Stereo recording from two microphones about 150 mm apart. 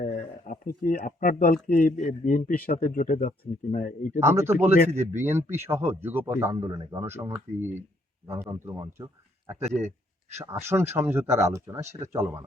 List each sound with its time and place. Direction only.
0.0 s speech: 60° left (ahead or behind)
4.2 s speech: 15° right (ahead or behind)
10.3 s speech: 15° right (ahead or behind)